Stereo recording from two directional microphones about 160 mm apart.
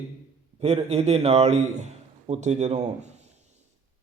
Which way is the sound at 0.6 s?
40° right (ahead or behind).